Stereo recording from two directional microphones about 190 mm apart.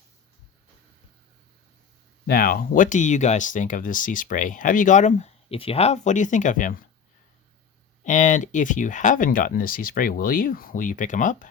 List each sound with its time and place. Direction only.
2.2 s speech: 50° left (ahead or behind)
8.0 s speech: 40° left (ahead or behind)